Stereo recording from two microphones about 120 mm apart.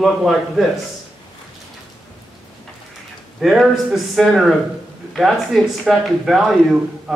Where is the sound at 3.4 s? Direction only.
Centre (ahead or behind).